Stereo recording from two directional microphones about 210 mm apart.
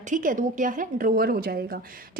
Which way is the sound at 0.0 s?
40° right (ahead or behind).